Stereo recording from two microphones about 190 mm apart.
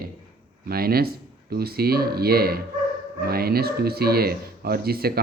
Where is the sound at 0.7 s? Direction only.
55° right (ahead or behind).